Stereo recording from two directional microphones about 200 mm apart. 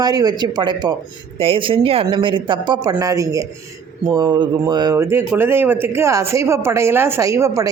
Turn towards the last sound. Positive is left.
turn(degrees=-15)  # may be behind; listen again after turning